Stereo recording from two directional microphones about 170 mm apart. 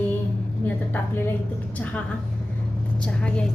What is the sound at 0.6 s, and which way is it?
A woman's voice, 10° left (ahead or behind).